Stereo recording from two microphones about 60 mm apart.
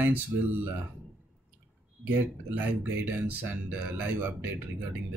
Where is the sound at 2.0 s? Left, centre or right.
Right.